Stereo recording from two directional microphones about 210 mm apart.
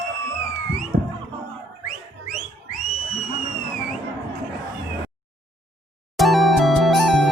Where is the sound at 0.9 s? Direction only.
45° right (ahead or behind).